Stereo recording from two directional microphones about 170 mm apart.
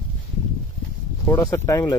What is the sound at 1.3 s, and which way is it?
Speech, 20° left (ahead or behind).